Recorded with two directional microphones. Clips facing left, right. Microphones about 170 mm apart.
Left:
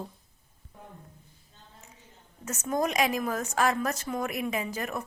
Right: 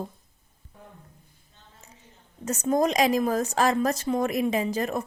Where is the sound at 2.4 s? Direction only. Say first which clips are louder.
Right 6 dB; 35° right (ahead or behind).